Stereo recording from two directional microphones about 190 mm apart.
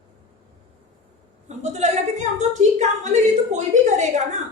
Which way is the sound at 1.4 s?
35° right (ahead or behind).